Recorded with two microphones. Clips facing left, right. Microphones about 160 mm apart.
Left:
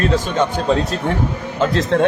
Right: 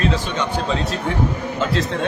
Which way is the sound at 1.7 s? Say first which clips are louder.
Left 9 dB; 55° left (ahead or behind).